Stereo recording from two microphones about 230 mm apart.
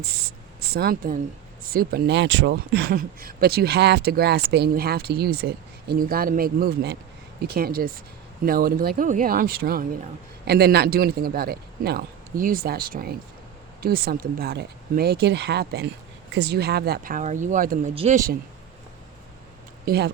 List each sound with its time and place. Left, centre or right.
0.0 s a man's voice: right
19.8 s speech: right